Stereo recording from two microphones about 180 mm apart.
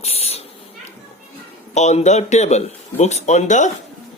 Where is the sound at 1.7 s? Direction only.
40° left (ahead or behind).